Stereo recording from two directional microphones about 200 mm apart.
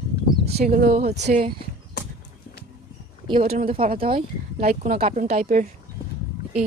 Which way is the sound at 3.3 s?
45° right (ahead or behind).